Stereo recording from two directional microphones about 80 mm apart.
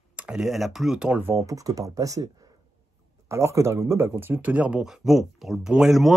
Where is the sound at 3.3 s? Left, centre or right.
Right.